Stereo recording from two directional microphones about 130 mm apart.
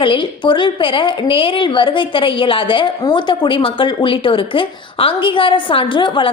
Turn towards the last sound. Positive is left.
turn(degrees=40)  # may be behind; listen again after turning